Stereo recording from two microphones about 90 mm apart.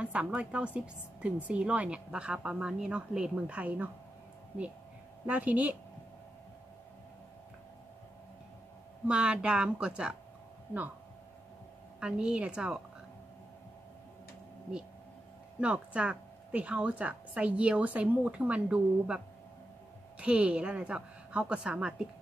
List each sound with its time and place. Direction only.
0.0 s a woman's voice: 15° right (ahead or behind)
5.2 s a woman's voice: 15° right (ahead or behind)
9.0 s a woman's voice: 10° right (ahead or behind)
12.0 s a woman's voice: 10° right (ahead or behind)
15.6 s a woman's voice: 15° right (ahead or behind)